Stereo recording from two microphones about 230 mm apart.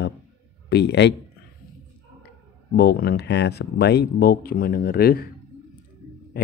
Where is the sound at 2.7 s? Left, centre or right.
Left.